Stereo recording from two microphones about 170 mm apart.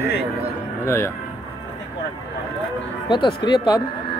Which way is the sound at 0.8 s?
15° left (ahead or behind).